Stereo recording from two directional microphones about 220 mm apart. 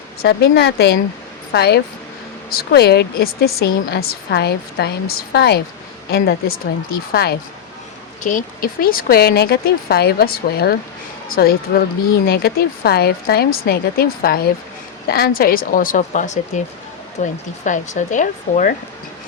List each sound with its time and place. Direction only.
0.2 s a woman's voice: 45° left (ahead or behind)
8.2 s a woman's voice: 35° left (ahead or behind)